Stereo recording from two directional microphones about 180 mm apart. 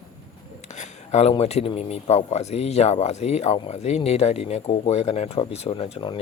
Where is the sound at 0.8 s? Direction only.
40° left (ahead or behind).